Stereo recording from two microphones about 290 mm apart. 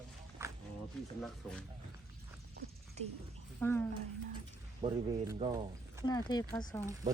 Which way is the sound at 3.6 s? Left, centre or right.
Centre.